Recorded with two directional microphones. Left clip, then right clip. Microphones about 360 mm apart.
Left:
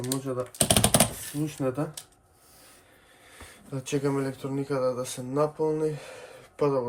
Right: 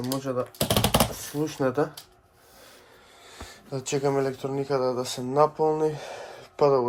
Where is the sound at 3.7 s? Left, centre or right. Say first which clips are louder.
Right 3 dB; centre.